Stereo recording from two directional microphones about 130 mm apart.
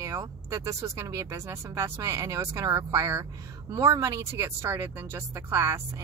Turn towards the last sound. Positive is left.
turn(degrees=-20)  # may be behind; listen again after turning